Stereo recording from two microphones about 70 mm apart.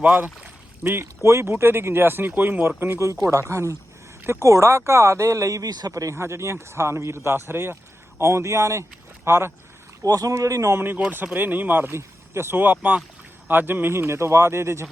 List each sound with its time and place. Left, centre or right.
0.0 s speech: right
0.9 s speech: right
3.5 s speech: right
10.0 s speech: right
10.8 s speech: right
11.9 s vehicle: right
12.5 s speech: right
13.5 s speech: right